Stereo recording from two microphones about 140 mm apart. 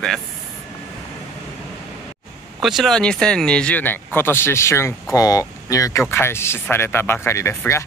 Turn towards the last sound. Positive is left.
turn(degrees=20)  # may be behind; listen again after turning